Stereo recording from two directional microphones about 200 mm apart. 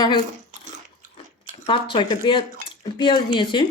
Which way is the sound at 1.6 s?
25° left (ahead or behind).